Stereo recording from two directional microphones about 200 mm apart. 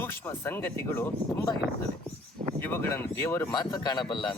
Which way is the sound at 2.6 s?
10° left (ahead or behind).